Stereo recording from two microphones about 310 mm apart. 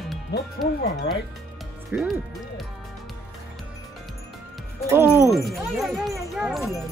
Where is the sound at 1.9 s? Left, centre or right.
Centre.